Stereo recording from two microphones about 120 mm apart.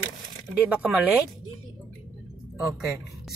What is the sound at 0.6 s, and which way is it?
Speech, 10° right (ahead or behind).